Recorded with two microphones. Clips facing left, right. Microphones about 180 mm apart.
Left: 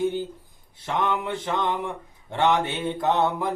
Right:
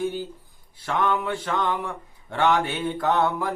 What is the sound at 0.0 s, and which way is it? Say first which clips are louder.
Speech: left 2 dB; 20° left (ahead or behind).